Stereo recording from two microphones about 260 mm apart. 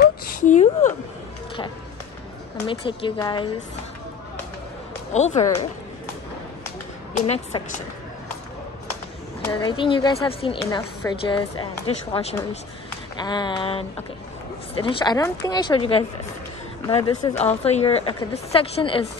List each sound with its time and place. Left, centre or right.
0.0 s a sound: left
2.6 s speech: centre
5.1 s a woman's voice: left
5.4 s speech: centre
7.2 s a woman's voice: left
9.5 s a woman's voice: centre